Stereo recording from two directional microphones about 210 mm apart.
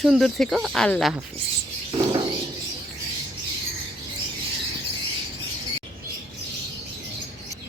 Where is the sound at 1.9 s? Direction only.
15° right (ahead or behind).